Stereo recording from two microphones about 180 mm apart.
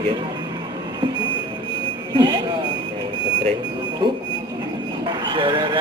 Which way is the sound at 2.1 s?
25° right (ahead or behind).